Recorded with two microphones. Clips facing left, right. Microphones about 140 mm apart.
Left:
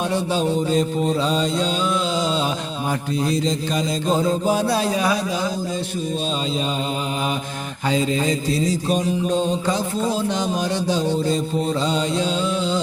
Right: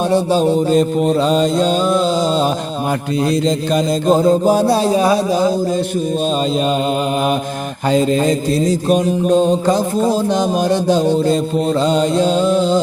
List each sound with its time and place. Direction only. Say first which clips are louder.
0.1 s mantra: right 7 dB; 35° right (ahead or behind)
0.7 s mantra: right 6 dB; 65° right (ahead or behind); by 2.5 s 40° right (ahead or behind)
3.4 s mantra: right 7 dB; 60° right (ahead or behind); by 5.5 s 35° right (ahead or behind)
7.9 s mantra: right 6 dB; 50° right (ahead or behind)